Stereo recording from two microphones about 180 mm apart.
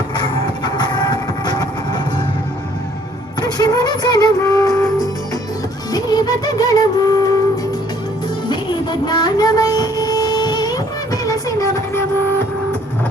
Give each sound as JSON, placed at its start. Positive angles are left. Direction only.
{"t": 0.2, "sound": "train", "side_deg": 25}
{"t": 3.4, "sound": "music", "side_deg": 20}